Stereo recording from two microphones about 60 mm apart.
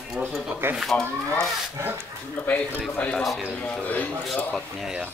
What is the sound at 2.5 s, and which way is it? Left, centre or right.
Speech, left.